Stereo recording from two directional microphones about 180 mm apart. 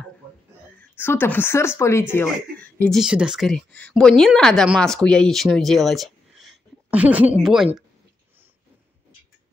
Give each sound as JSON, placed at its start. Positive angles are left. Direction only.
{"t": 0.9, "sound": "speech", "side_deg": 10}
{"t": 3.0, "sound": "speech", "side_deg": -5}